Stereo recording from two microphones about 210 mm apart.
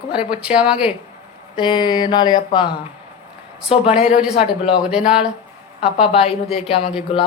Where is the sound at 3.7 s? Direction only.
30° left (ahead or behind).